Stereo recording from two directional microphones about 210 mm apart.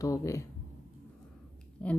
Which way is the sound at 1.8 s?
5° left (ahead or behind).